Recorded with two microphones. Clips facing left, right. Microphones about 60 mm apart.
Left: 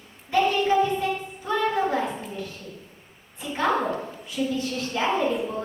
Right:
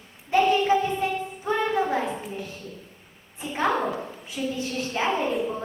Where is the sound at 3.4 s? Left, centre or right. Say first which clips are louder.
Right 1 dB; centre.